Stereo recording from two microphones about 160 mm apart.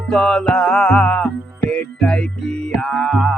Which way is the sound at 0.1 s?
5° left (ahead or behind).